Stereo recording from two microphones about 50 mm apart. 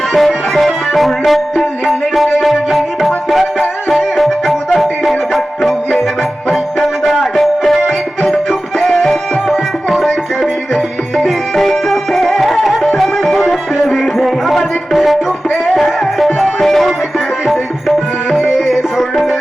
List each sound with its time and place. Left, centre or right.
0.1 s music: centre